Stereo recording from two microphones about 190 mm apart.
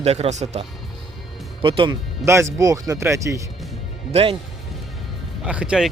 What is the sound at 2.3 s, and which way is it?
Speech, 15° right (ahead or behind).